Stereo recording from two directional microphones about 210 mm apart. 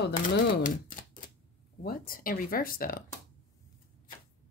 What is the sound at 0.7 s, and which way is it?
Typewriter, 40° left (ahead or behind).